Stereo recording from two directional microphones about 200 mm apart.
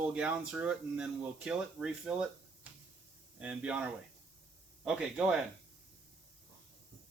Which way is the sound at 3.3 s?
5° right (ahead or behind).